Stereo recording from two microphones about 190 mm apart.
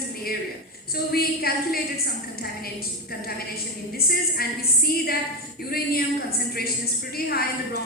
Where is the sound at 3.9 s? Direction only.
55° left (ahead or behind).